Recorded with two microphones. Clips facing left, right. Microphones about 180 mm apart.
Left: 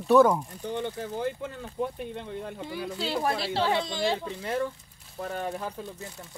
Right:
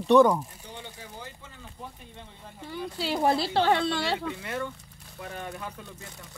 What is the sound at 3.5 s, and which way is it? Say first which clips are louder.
Speech: right 3 dB; 65° right (ahead or behind).